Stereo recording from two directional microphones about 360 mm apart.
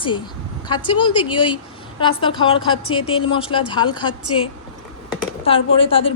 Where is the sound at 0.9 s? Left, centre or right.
Centre.